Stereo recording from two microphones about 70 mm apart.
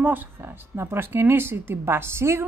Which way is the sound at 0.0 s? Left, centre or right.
Right.